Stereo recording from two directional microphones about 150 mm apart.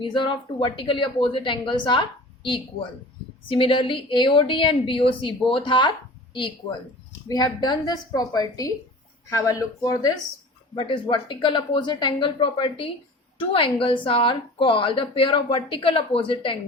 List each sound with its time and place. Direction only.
0.0 s a woman's voice: 35° left (ahead or behind)
10.8 s a woman's voice: 35° left (ahead or behind)